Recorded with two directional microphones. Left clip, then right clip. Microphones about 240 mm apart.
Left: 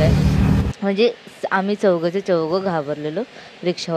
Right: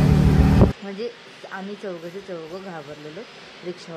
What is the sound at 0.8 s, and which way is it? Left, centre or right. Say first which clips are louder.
A woman's voice: left 13 dB; left.